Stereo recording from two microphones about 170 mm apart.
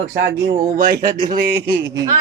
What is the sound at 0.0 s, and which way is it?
Speech, 90° right.